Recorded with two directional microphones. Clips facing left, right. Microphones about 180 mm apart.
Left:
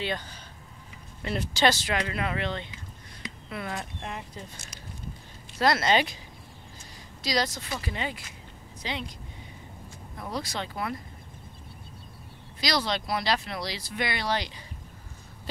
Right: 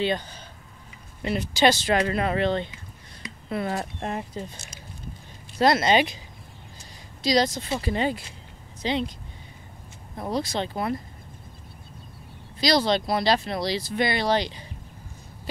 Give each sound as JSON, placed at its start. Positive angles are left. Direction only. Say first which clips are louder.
{"t": 1.3, "sound": "speech", "louder": "right 4 dB", "side_deg": -10}
{"t": 1.9, "sound": "speech", "louder": "right 7 dB", "side_deg": -40}
{"t": 5.6, "sound": "speech", "louder": "right 4 dB", "side_deg": -20}
{"t": 7.2, "sound": "speech", "louder": "right 6 dB", "side_deg": -20}
{"t": 7.8, "sound": "speech", "louder": "right 8 dB", "side_deg": -35}
{"t": 10.1, "sound": "speech", "louder": "right 6 dB", "side_deg": -30}
{"t": 12.5, "sound": "speech", "louder": "right 7 dB", "side_deg": -30}